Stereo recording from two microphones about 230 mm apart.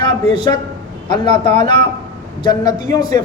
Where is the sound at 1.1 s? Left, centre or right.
Left.